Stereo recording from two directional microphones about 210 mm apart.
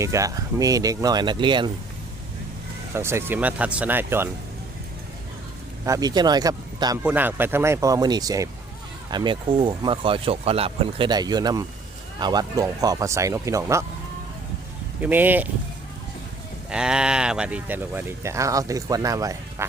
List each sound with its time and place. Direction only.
0.0 s speech: 15° right (ahead or behind)
2.9 s speech: 10° right (ahead or behind)
5.8 s speech: 15° right (ahead or behind)
7.0 s speech: 10° right (ahead or behind)
15.0 s speech: 10° right (ahead or behind)
16.6 s speech: 5° right (ahead or behind)